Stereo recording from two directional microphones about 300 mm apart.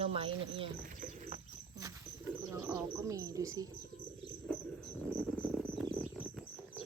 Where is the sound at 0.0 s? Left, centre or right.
Centre.